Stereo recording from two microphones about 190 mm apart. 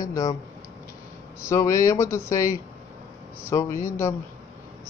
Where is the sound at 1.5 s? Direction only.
15° left (ahead or behind).